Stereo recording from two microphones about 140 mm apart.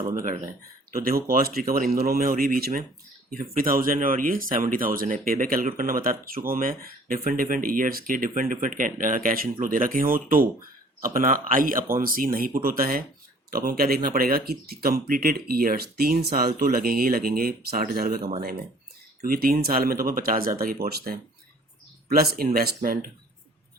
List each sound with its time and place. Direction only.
0.9 s speech: 90° right